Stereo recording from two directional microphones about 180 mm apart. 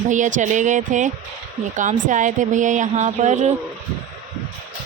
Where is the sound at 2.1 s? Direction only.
45° right (ahead or behind).